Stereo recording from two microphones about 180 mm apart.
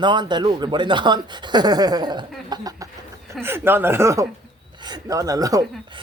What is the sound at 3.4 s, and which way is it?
Speech, 10° right (ahead or behind).